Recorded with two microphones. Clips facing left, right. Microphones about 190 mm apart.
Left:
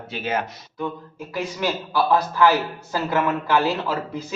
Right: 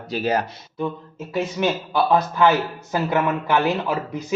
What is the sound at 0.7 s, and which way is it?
A man's voice, 25° right (ahead or behind).